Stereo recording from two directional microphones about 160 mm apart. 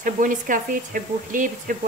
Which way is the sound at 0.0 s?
55° right (ahead or behind).